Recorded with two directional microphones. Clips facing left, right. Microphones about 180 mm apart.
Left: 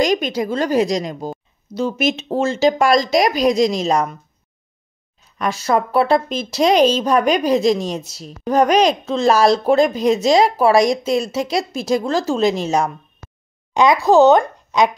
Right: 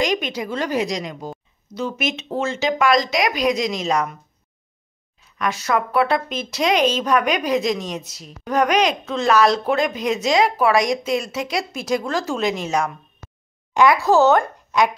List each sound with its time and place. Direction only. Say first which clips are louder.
0.0 s speech: left 5 dB; 40° left (ahead or behind)
5.4 s speech: left 3 dB; 30° left (ahead or behind)
13.7 s speech: left 3 dB; 20° left (ahead or behind)